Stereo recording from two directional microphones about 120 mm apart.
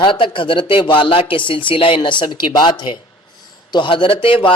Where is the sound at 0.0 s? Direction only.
45° left (ahead or behind).